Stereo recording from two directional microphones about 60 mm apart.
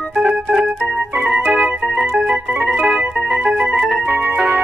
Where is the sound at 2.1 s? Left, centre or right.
Centre.